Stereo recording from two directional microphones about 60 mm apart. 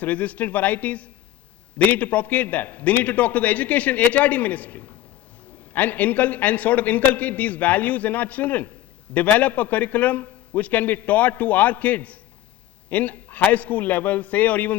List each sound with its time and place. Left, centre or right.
0.0 s a man's voice: left